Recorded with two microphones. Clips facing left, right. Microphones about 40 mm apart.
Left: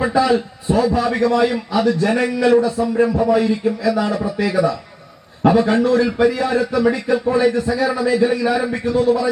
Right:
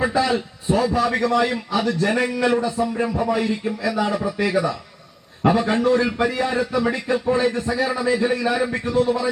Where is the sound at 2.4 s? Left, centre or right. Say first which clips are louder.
Left 5 dB; centre.